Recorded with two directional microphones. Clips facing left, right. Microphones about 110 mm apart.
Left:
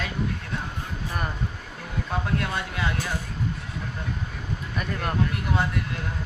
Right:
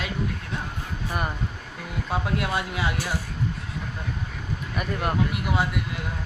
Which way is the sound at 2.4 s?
10° right (ahead or behind).